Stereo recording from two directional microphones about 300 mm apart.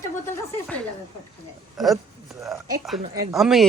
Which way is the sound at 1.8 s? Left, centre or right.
Centre.